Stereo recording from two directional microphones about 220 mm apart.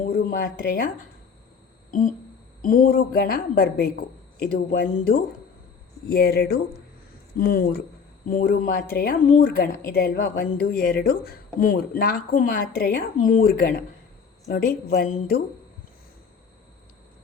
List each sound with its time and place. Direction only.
0.0 s a woman's voice: 40° left (ahead or behind)
1.9 s a sound: 35° left (ahead or behind)
2.6 s a woman's voice: 40° left (ahead or behind)